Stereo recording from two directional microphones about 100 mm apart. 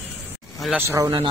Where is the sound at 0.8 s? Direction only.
35° right (ahead or behind).